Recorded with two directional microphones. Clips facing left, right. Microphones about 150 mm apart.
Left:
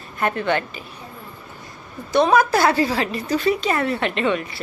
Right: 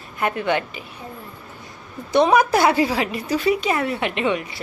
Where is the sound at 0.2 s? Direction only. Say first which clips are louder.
Even; 10° right (ahead or behind).